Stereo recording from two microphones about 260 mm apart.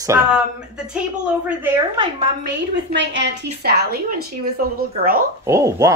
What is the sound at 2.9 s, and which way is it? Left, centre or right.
A woman's voice, right.